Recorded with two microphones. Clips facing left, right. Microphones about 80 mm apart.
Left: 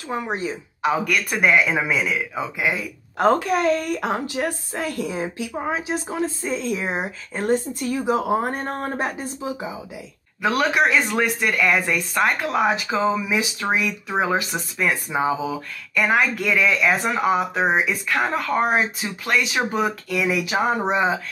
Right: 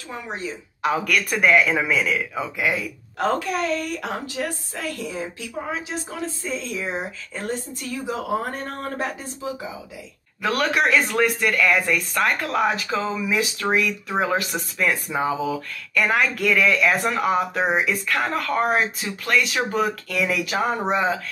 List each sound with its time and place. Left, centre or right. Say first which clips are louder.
0.1 s a woman's voice: left 5 dB; left
0.8 s speech: left 1 dB; centre
3.3 s speech: left 5 dB; left
4.0 s speech: left 4 dB; left
10.4 s speech: left 2 dB; centre